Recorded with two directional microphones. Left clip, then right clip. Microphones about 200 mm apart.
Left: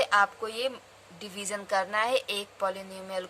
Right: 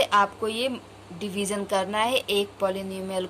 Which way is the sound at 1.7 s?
30° left (ahead or behind).